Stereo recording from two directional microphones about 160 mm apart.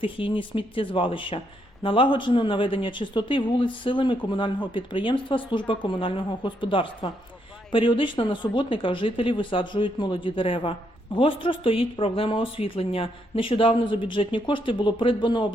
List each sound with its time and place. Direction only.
0.0 s speech: 35° left (ahead or behind)